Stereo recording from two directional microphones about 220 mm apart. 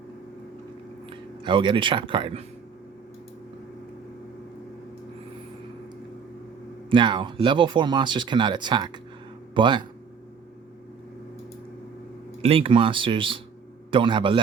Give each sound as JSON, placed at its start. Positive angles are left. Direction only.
{"t": 1.1, "sound": "speech", "side_deg": -20}
{"t": 6.9, "sound": "speech", "side_deg": -20}
{"t": 12.4, "sound": "speech", "side_deg": -25}